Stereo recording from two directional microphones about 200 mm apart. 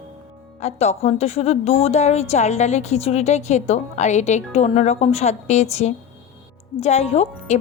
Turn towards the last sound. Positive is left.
turn(degrees=30)  # may be behind; listen again after turning